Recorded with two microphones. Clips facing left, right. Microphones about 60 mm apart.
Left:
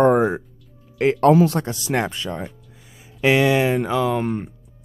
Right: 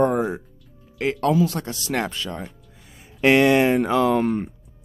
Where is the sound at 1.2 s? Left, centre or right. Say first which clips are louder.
Left 5 dB; left.